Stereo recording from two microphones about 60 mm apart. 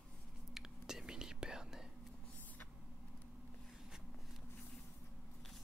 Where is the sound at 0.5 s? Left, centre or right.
Centre.